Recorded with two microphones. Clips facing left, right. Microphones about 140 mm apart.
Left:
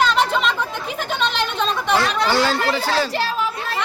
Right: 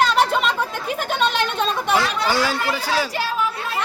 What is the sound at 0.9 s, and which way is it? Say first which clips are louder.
Speech: right 2 dB; 50° right (ahead or behind).